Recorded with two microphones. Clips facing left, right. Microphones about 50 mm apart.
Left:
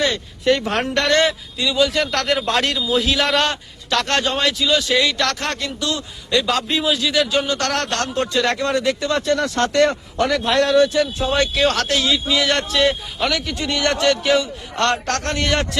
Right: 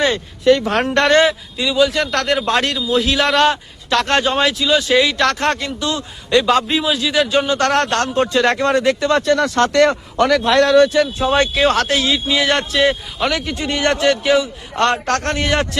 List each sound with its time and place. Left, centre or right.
0.9 s speech: right
1.2 s a man's voice: centre
5.2 s speech: right
6.7 s a man's voice: centre
7.3 s speech: right
7.7 s speech: right
9.2 s a man's voice: right
11.2 s speech: right
12.5 s a man's voice: centre
13.3 s speech: right
14.3 s a man's voice: centre
15.0 s speech: right
15.4 s a man's voice: centre